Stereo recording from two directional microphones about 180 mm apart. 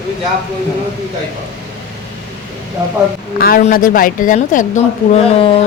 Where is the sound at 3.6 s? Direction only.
50° left (ahead or behind); by 5.6 s 35° left (ahead or behind).